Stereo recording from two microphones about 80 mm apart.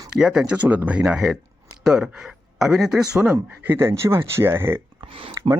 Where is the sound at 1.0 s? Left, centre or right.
Centre.